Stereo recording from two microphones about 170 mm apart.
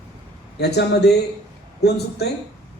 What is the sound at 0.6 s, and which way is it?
Speech, 75° left (ahead or behind).